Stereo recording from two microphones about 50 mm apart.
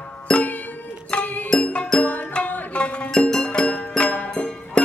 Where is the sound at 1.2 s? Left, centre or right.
Left.